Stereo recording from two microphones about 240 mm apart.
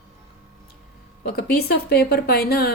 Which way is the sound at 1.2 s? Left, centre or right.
Left.